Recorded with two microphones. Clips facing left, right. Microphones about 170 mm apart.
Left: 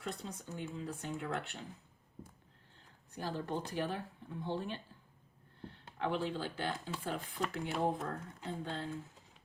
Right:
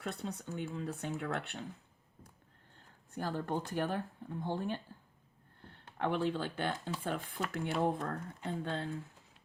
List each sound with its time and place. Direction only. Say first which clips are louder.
0.0 s speech: right 3 dB; 60° right (ahead or behind)
3.1 s speech: right 2 dB; 50° right (ahead or behind)